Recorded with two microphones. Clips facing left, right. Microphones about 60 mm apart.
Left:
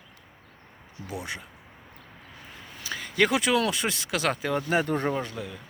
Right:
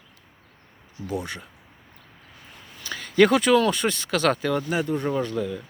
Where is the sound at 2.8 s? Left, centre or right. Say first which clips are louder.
Right 6 dB; centre.